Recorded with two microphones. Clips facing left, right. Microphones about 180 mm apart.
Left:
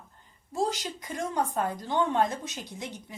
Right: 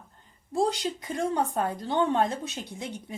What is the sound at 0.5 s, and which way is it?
A woman's voice, 30° right (ahead or behind).